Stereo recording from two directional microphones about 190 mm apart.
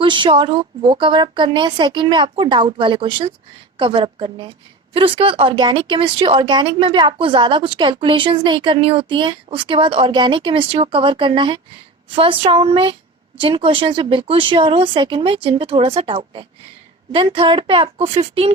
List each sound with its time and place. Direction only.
0.0 s speech: 25° right (ahead or behind)